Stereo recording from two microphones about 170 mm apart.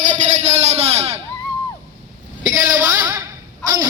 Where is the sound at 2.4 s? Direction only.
15° right (ahead or behind).